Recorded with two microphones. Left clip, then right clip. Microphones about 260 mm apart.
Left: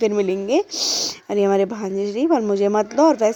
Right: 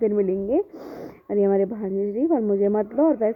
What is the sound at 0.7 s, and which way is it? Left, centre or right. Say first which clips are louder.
Speech: left 14 dB; centre.